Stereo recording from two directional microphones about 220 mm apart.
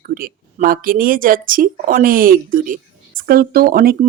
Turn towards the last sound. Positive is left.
turn(degrees=-40)  # may be behind; listen again after turning